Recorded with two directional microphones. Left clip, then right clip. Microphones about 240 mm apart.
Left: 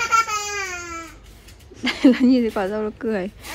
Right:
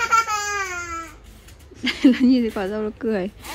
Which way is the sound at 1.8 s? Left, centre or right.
Centre.